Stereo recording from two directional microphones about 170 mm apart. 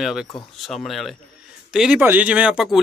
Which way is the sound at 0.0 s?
Centre (ahead or behind).